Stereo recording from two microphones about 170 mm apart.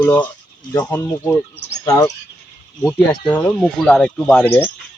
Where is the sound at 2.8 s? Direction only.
10° left (ahead or behind).